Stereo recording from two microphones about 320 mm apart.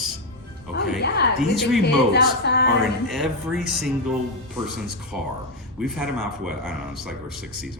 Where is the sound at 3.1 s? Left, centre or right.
Centre.